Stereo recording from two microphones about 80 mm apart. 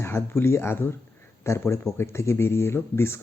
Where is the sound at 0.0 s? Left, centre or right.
Left.